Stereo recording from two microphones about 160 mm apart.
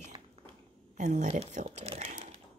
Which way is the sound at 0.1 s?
30° right (ahead or behind).